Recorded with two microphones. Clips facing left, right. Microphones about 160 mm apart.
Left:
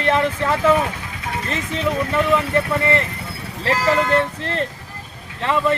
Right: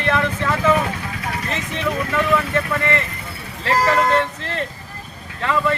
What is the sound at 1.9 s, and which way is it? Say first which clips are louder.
Speech: left 1 dB; 20° left (ahead or behind).